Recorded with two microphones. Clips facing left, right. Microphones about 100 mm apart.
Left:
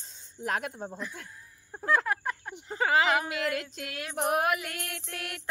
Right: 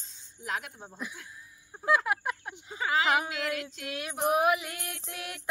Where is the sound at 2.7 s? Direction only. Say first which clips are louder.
Left 4 dB; 55° left (ahead or behind).